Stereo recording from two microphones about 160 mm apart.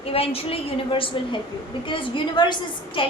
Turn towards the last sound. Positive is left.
turn(degrees=30)  # may be behind; listen again after turning